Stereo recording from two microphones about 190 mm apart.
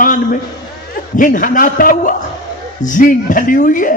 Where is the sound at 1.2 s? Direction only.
45° left (ahead or behind).